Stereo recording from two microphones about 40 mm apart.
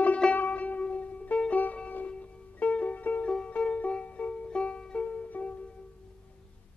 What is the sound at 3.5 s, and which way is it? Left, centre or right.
Music, left.